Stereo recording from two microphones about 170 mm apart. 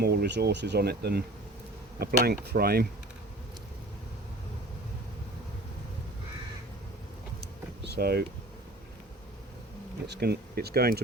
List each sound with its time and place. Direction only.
0.0 s speech: 70° right (ahead or behind)
7.9 s speech: 65° right (ahead or behind)
10.1 s speech: 70° right (ahead or behind)